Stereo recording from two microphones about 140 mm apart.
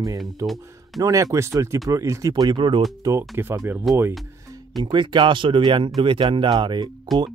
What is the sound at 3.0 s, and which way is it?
Speech, 20° right (ahead or behind).